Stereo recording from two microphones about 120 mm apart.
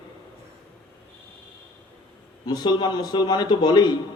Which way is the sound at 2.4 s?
35° left (ahead or behind).